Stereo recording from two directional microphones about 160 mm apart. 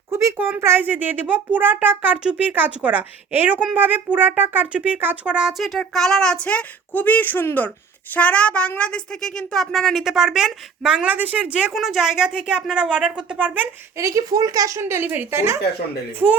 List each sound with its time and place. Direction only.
0.1 s speech: 20° right (ahead or behind)
14.0 s speech: 20° right (ahead or behind)